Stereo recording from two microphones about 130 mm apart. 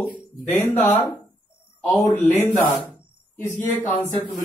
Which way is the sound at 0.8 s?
15° left (ahead or behind).